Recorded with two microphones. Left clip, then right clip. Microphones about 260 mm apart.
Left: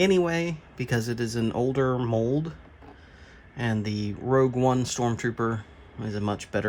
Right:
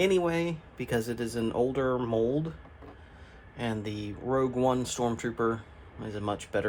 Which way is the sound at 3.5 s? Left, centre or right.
Left.